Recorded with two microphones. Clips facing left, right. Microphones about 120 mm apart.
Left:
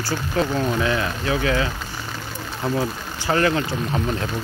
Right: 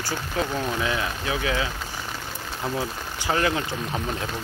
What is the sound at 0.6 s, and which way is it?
Speech, 10° right (ahead or behind).